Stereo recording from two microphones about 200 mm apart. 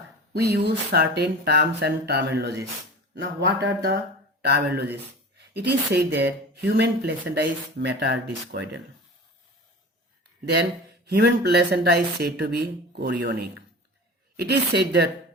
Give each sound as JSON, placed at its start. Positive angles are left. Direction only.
{"t": 0.6, "sound": "speech", "side_deg": -55}
{"t": 11.0, "sound": "speech", "side_deg": -50}